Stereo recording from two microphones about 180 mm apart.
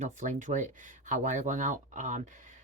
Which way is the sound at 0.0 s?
45° right (ahead or behind).